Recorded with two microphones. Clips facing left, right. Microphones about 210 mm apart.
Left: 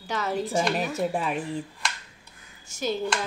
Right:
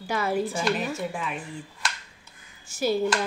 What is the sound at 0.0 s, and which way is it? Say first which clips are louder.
Speech: right 2 dB; 10° right (ahead or behind).